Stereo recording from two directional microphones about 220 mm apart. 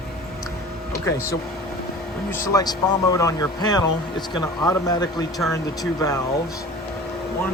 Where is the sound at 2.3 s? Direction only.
15° left (ahead or behind).